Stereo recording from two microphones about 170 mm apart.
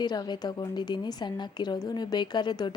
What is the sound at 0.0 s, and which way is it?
A woman's voice, 25° left (ahead or behind).